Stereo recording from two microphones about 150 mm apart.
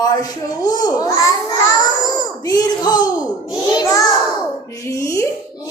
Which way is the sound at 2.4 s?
25° left (ahead or behind).